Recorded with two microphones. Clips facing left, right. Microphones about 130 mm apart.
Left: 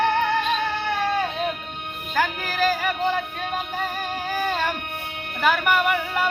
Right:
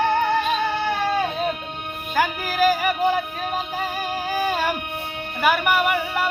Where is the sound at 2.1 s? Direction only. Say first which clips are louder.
Right 2 dB; 10° right (ahead or behind).